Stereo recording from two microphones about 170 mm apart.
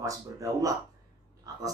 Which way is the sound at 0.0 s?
20° right (ahead or behind).